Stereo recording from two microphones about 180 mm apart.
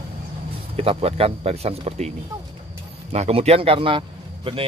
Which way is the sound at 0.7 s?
35° right (ahead or behind).